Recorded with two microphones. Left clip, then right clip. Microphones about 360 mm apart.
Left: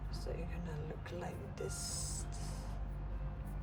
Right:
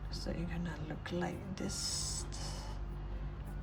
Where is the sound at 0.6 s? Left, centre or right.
Right.